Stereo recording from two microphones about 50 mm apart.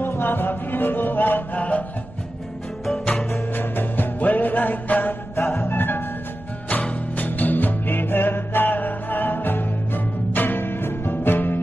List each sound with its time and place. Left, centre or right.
0.0 s music: left
2.9 s music: centre
3.5 s music: left
6.7 s music: left